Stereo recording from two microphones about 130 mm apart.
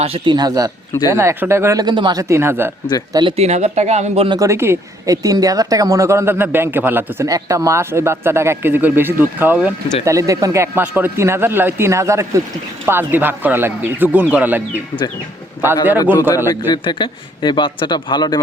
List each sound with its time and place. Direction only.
0.0 s a man's voice: 50° right (ahead or behind)
0.3 s speech: 30° right (ahead or behind)
2.2 s speech: 20° right (ahead or behind)
3.1 s speech: 35° right (ahead or behind)
3.3 s speech: 55° right (ahead or behind)
4.3 s speech: 25° right (ahead or behind)
10.0 s a man's voice: 25° right (ahead or behind)
15.6 s a man's voice: 15° right (ahead or behind)
16.5 s a man's voice: 35° left (ahead or behind)